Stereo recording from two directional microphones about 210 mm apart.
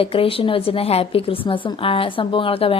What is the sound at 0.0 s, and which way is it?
A woman's voice, 25° left (ahead or behind).